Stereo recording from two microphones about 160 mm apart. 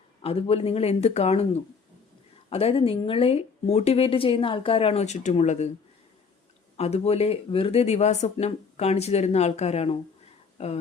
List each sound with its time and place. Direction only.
0.2 s speech: 35° left (ahead or behind)
6.7 s speech: 40° left (ahead or behind)